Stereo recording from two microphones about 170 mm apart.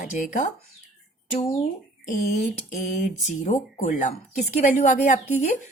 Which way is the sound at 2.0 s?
45° left (ahead or behind).